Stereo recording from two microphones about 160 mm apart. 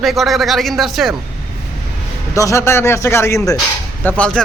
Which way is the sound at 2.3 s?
20° left (ahead or behind).